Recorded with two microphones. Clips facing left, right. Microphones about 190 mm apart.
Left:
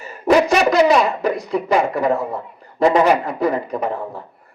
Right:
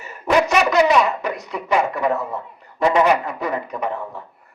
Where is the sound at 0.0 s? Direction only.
35° left (ahead or behind).